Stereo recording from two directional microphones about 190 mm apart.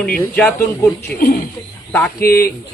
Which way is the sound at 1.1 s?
50° left (ahead or behind).